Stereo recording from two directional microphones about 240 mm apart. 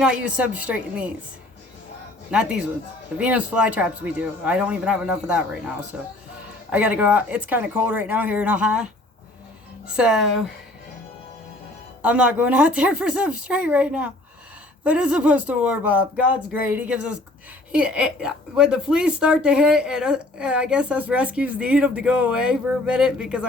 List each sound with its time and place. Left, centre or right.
0.0 s speech: centre
2.3 s speech: centre
12.0 s speech: centre